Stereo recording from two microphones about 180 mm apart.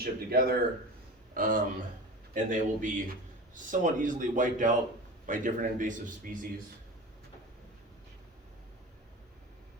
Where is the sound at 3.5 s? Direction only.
45° right (ahead or behind).